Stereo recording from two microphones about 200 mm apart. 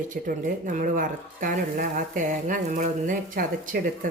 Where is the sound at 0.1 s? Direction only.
40° right (ahead or behind).